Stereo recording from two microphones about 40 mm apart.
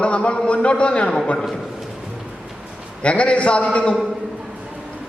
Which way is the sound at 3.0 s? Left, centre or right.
Left.